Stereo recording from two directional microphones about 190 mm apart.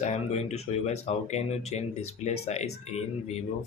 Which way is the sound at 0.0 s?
35° left (ahead or behind).